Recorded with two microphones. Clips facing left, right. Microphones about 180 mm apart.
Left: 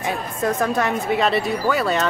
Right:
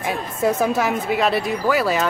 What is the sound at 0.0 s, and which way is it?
A woman's voice, 10° right (ahead or behind).